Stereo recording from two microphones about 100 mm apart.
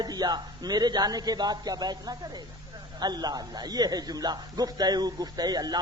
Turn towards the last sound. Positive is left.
turn(degrees=-45)  # may be behind; listen again after turning